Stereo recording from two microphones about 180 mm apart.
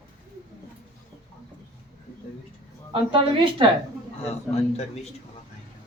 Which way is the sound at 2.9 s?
30° right (ahead or behind).